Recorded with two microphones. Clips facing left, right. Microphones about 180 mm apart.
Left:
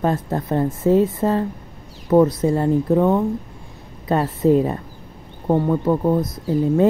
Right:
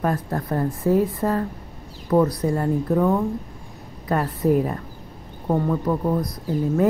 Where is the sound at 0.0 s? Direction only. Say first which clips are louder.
Left 3 dB; 25° left (ahead or behind).